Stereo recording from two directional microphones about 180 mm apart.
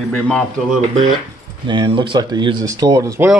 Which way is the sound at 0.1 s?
5° left (ahead or behind).